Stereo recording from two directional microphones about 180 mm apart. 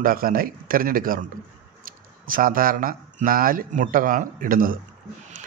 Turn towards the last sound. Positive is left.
turn(degrees=-50)  # may be behind; listen again after turning